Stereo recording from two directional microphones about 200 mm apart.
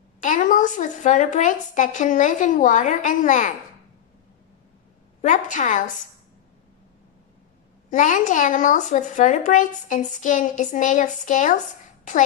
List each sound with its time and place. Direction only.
0.2 s speech: 40° left (ahead or behind)
5.2 s speech: 40° left (ahead or behind)
7.9 s speech: 40° left (ahead or behind)